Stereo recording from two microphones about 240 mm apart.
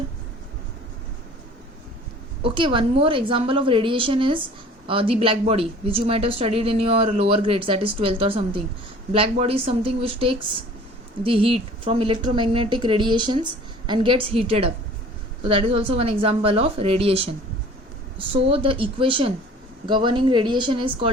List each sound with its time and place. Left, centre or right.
2.4 s speech: right
18.3 s speech: right